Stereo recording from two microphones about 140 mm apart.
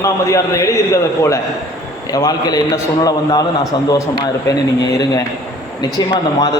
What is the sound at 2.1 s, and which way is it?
A man's voice, 25° left (ahead or behind).